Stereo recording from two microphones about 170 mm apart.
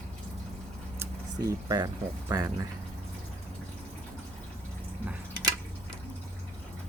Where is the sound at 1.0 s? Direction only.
20° right (ahead or behind).